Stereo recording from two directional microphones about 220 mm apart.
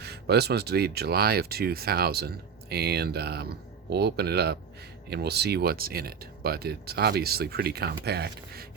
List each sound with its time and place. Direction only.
0.0 s speech: 45° right (ahead or behind)